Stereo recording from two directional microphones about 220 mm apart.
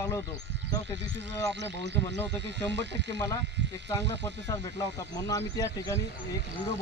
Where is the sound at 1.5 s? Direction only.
50° right (ahead or behind).